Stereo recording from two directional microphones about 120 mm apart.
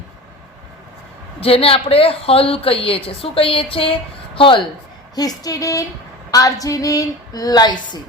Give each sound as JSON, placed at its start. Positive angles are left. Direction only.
{"t": 1.4, "sound": "a woman's voice", "side_deg": 50}
{"t": 5.1, "sound": "a woman's voice", "side_deg": 30}